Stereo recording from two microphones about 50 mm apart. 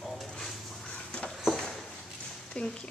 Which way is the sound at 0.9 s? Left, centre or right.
Left.